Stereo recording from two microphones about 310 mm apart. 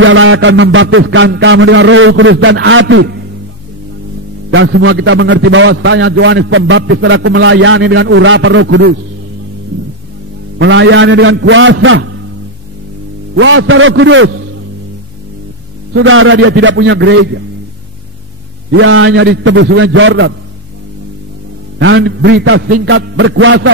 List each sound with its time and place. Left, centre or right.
0.0 s a man's voice: right
4.5 s a man's voice: right
10.6 s a man's voice: right
13.4 s a man's voice: right
15.9 s a man's voice: right
18.7 s a man's voice: right
21.7 s a man's voice: right